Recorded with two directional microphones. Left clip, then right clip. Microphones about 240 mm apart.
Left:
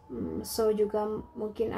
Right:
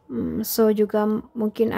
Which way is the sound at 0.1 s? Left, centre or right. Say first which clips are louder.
Right 8 dB; right.